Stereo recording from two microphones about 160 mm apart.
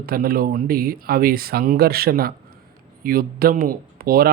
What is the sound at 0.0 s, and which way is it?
Speech, 70° right (ahead or behind).